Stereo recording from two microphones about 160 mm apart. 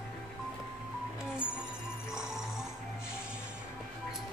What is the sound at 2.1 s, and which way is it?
Music, 5° right (ahead or behind).